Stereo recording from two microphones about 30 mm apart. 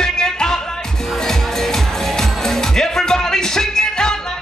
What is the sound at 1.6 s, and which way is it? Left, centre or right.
Music, centre.